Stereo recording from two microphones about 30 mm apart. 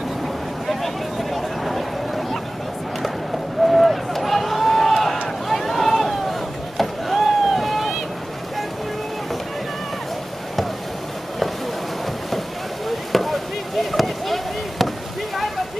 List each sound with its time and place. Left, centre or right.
0.7 s a sound: centre
3.6 s run: centre
5.5 s vehicle: centre
12.8 s basketball bounce: centre